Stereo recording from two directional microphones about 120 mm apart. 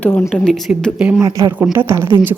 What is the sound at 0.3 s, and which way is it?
Speech, 5° left (ahead or behind).